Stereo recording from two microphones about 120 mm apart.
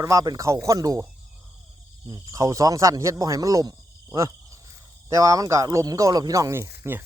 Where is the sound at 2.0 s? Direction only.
35° right (ahead or behind).